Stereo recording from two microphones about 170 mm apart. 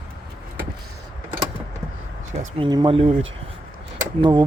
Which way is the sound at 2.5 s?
30° right (ahead or behind).